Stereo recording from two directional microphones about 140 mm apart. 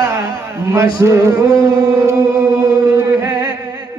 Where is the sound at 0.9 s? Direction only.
20° right (ahead or behind).